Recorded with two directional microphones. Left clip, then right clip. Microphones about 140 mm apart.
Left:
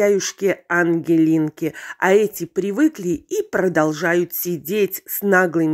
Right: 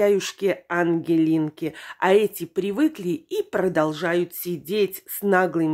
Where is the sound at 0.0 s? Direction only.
25° left (ahead or behind).